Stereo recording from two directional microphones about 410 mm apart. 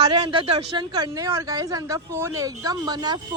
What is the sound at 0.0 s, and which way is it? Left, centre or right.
Speech, centre.